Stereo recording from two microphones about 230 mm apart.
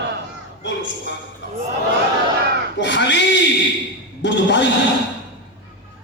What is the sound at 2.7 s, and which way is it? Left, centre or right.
A man's voice, left.